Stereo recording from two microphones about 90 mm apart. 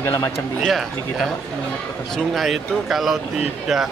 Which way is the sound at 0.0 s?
35° left (ahead or behind).